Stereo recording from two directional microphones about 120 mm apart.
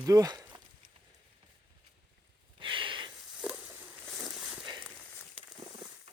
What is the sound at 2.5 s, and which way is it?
Snort, 45° right (ahead or behind).